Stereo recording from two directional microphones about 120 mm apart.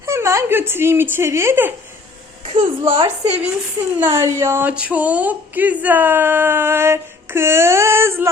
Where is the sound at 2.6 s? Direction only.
55° right (ahead or behind).